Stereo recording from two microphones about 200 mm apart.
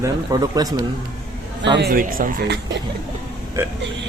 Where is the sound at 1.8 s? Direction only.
45° right (ahead or behind).